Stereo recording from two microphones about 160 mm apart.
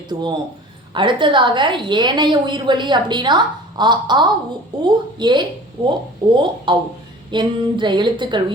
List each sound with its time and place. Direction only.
0.1 s a woman's voice: 30° right (ahead or behind)